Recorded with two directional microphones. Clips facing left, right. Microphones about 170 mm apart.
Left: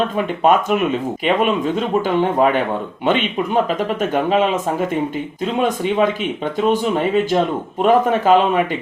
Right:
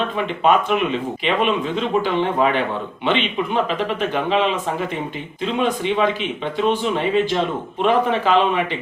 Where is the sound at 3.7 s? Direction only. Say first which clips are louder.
Left 3 dB; 45° left (ahead or behind).